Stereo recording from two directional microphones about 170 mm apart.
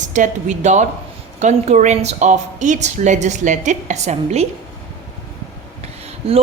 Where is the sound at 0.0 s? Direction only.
45° right (ahead or behind).